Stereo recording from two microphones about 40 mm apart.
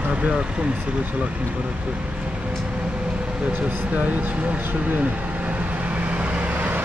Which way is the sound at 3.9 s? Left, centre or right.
Right.